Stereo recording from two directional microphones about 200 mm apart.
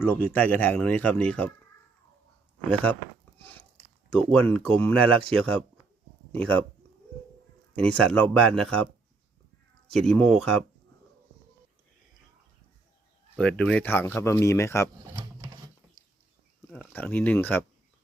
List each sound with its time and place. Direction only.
0.0 s speech: 10° left (ahead or behind)
2.6 s speech: 5° left (ahead or behind)
7.8 s speech: 5° left (ahead or behind)
9.9 s speech: centre (ahead or behind)
13.3 s speech: 5° left (ahead or behind)
15.1 s a sound: 20° right (ahead or behind)
16.6 s speech: 10° left (ahead or behind)